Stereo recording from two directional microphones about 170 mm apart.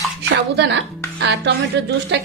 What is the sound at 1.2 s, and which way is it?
A woman's voice, 85° right.